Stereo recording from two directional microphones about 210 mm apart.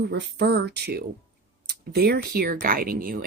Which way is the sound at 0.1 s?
55° right (ahead or behind).